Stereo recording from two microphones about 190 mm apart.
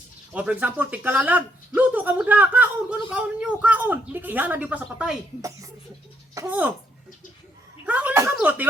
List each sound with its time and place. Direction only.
0.3 s speech: 5° right (ahead or behind)
5.4 s speech: 15° right (ahead or behind)
7.9 s a sound: 10° right (ahead or behind)